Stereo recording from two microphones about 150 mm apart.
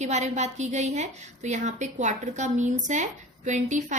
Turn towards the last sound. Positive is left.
turn(degrees=-55)  # may be behind; listen again after turning